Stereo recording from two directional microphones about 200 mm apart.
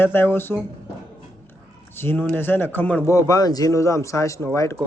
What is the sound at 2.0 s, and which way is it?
Speech, 10° left (ahead or behind).